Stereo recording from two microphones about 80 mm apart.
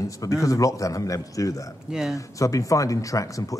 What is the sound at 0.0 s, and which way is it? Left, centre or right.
Speech, left.